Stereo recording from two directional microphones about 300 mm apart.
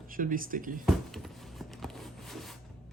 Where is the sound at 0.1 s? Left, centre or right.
Right.